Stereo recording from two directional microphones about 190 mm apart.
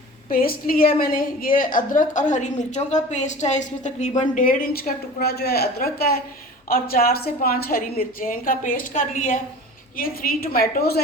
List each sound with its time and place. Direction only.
0.3 s a woman's voice: 50° left (ahead or behind)